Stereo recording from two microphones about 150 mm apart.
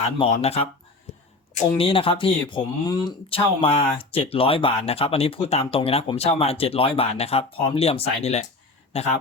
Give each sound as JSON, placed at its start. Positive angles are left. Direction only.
{"t": 0.2, "sound": "speech", "side_deg": 45}
{"t": 1.8, "sound": "speech", "side_deg": 35}
{"t": 3.2, "sound": "speech", "side_deg": 40}